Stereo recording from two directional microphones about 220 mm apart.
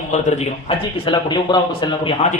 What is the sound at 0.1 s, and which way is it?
A man's voice, 30° left (ahead or behind).